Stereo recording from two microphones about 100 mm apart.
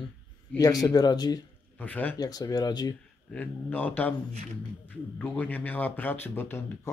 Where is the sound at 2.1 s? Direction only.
40° left (ahead or behind).